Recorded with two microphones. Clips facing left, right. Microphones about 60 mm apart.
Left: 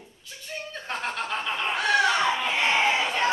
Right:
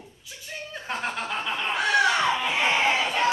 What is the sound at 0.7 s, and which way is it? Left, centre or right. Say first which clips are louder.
Chuckle: right 1 dB; centre.